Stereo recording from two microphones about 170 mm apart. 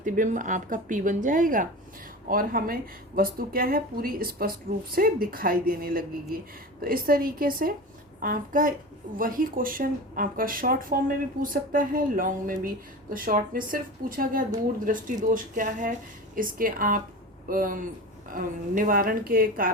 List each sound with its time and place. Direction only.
0.0 s speech: 50° right (ahead or behind)